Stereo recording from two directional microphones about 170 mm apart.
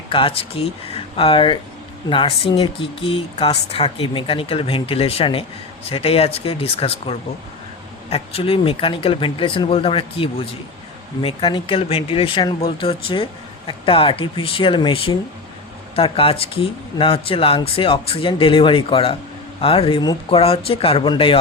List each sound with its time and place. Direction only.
0.1 s speech: 30° left (ahead or behind)